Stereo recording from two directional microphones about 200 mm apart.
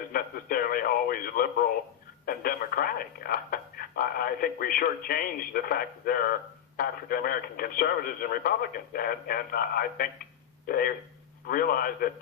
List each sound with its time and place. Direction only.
0.1 s radio: 45° left (ahead or behind)
2.2 s speech: 45° left (ahead or behind)